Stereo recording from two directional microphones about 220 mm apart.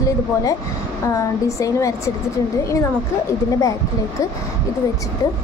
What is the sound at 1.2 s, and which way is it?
Speech, 15° left (ahead or behind).